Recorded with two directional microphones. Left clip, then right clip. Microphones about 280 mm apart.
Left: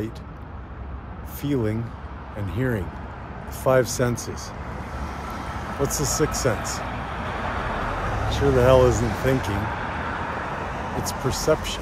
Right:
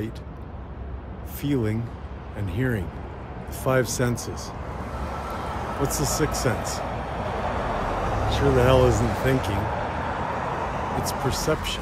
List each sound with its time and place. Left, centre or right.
1.4 s speech: centre
5.8 s speech: centre
6.5 s a sound: right
8.3 s speech: centre
9.5 s vehicle: right
11.4 s speech: centre